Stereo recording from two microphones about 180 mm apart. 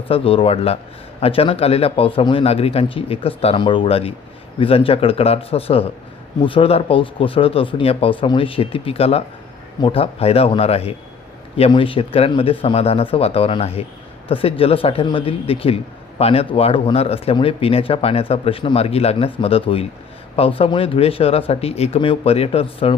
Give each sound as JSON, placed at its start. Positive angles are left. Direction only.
{"t": 0.1, "sound": "a man's voice", "side_deg": 30}